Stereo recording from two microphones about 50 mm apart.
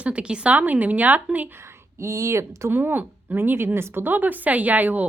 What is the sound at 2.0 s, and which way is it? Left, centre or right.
Speech, right.